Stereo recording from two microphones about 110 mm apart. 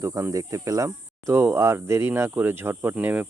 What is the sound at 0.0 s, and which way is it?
Speech, 25° right (ahead or behind).